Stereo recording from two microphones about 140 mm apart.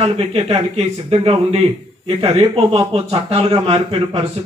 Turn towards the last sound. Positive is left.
turn(degrees=-40)  # may be behind; listen again after turning